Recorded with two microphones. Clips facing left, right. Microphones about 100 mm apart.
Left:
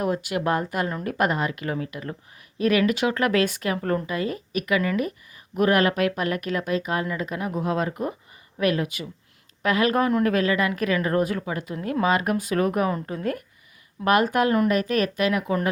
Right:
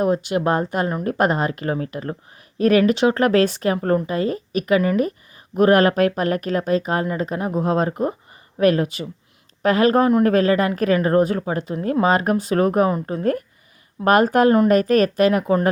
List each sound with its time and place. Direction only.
0.0 s speech: 25° right (ahead or behind)